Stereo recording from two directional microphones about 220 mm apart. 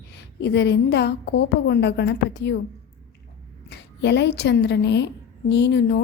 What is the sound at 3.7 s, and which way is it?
A woman's voice, 50° left (ahead or behind).